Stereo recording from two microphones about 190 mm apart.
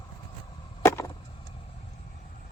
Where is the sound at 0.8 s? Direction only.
15° left (ahead or behind).